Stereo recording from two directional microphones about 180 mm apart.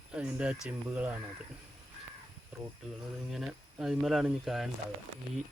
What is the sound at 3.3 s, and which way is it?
Speech, centre (ahead or behind).